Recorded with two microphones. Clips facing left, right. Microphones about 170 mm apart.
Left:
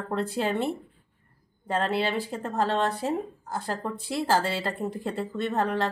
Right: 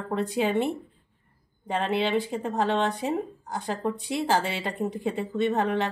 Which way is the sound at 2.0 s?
Centre (ahead or behind).